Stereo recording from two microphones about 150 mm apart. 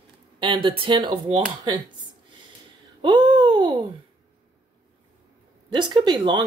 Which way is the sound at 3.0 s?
30° right (ahead or behind).